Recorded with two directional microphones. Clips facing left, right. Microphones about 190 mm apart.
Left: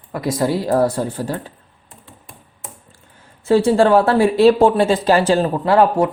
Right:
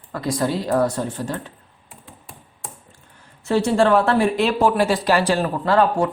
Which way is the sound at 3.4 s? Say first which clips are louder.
Left 4 dB; 30° left (ahead or behind).